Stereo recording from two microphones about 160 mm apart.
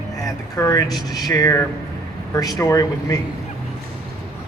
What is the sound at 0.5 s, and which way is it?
A man's voice, 20° left (ahead or behind).